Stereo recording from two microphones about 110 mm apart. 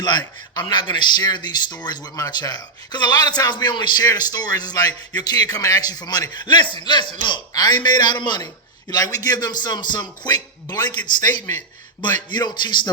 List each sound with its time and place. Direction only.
0.0 s a man's voice: 40° left (ahead or behind)
12.3 s a man's voice: 40° left (ahead or behind)